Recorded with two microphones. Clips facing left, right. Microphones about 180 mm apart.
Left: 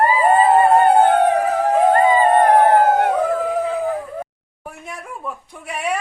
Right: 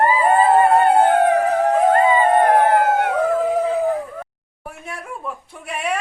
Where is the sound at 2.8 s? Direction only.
45° left (ahead or behind).